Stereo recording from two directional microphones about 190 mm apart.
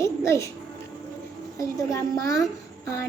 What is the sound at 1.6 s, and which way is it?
Speech, 15° left (ahead or behind).